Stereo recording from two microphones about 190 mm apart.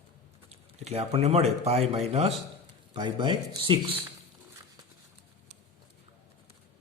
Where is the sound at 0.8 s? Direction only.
35° right (ahead or behind).